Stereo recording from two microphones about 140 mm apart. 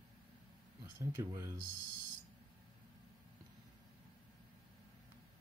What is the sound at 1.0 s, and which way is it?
Speech, 20° right (ahead or behind).